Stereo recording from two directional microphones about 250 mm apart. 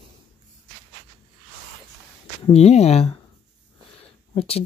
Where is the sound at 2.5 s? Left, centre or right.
Left.